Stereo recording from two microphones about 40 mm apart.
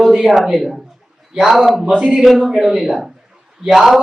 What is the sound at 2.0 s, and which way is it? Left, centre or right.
Speech, right.